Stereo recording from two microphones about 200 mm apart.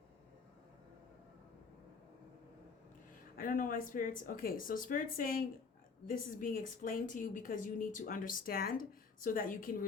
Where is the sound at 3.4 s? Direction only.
45° left (ahead or behind).